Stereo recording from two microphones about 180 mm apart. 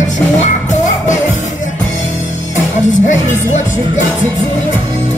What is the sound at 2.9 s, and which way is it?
Music, 40° left (ahead or behind).